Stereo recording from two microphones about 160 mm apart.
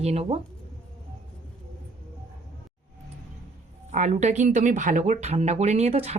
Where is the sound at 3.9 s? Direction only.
45° right (ahead or behind).